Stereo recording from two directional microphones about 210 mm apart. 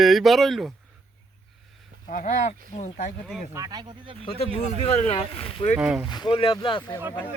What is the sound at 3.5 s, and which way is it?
Speech, 20° right (ahead or behind).